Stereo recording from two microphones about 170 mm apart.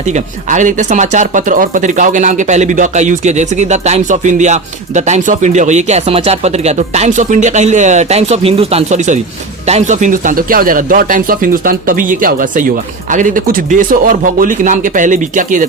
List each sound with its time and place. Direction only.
0.0 s speech: 45° right (ahead or behind)